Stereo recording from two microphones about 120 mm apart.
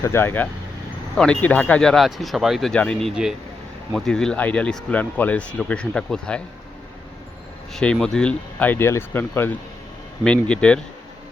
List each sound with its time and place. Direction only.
0.0 s speech: 20° left (ahead or behind)
1.1 s speech: 5° left (ahead or behind)
7.7 s speech: 5° left (ahead or behind)